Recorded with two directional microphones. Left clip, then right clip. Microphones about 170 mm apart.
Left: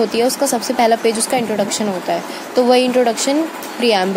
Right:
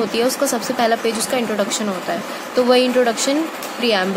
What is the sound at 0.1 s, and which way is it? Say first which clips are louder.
A woman's voice: left 2 dB; 15° left (ahead or behind).